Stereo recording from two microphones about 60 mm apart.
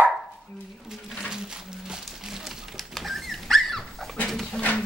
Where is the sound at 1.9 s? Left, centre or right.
Centre.